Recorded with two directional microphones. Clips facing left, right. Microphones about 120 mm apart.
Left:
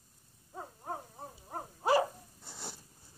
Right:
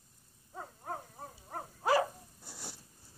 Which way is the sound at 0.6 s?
15° left (ahead or behind).